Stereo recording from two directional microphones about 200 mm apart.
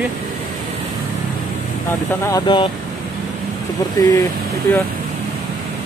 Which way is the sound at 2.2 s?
20° left (ahead or behind).